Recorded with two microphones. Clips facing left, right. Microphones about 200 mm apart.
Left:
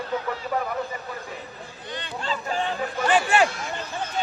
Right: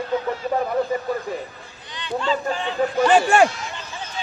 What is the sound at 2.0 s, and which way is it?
Speech, 45° left (ahead or behind).